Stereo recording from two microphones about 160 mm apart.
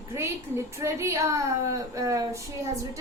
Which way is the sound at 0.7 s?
15° right (ahead or behind).